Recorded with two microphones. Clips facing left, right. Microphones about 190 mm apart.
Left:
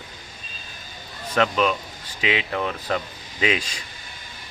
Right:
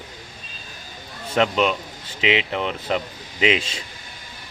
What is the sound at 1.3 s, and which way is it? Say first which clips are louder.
A man's voice: right 1 dB; 25° right (ahead or behind).